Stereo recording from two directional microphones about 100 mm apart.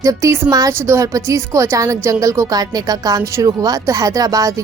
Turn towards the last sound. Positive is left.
turn(degrees=-35)  # may be behind; listen again after turning